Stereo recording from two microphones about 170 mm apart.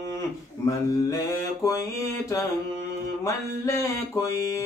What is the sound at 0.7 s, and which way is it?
Mantra, 20° left (ahead or behind).